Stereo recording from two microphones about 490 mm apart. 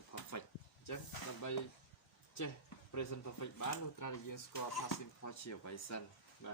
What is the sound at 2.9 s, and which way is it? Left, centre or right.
Speech, left.